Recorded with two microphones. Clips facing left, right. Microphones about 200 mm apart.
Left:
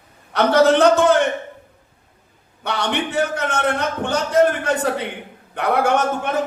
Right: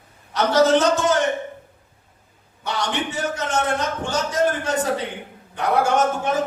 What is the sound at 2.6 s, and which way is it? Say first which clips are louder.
A man's voice: left 2 dB; 60° left (ahead or behind).